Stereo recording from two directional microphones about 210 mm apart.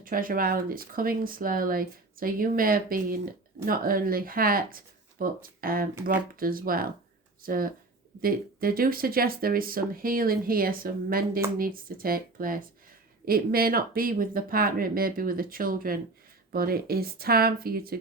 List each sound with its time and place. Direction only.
0.0 s speech: 40° right (ahead or behind)